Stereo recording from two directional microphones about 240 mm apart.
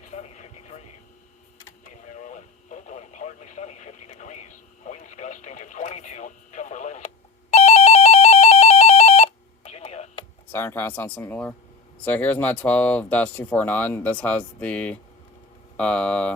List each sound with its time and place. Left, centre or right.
0.0 s a sound: left
2.0 s radio: left
7.5 s telephone bell ringing: left
10.5 s speech: centre